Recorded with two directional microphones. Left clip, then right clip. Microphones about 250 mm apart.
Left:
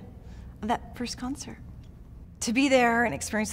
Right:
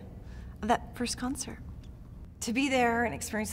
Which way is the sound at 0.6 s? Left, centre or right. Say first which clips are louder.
Right 1 dB; centre.